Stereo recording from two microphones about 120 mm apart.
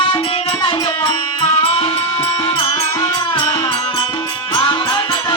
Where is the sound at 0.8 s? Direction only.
30° left (ahead or behind).